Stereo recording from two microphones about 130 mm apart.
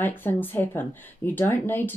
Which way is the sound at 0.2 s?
15° left (ahead or behind).